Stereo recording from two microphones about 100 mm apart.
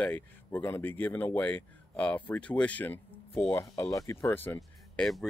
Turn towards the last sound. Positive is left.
turn(degrees=5)  # may be behind; listen again after turning